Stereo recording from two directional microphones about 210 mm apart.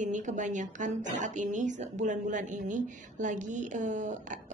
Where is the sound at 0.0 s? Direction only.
35° right (ahead or behind).